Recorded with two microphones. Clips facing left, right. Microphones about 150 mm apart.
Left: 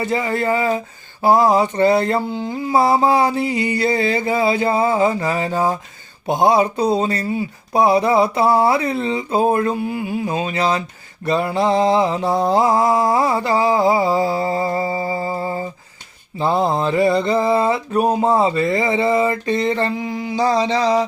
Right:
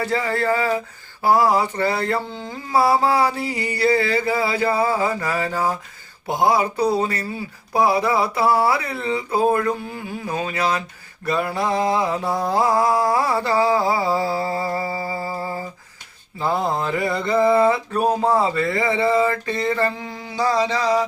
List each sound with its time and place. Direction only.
0.0 s mantra: 20° left (ahead or behind)